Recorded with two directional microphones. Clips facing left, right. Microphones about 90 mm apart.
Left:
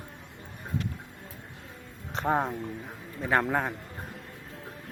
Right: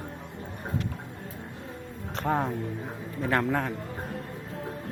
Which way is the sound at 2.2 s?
20° left (ahead or behind).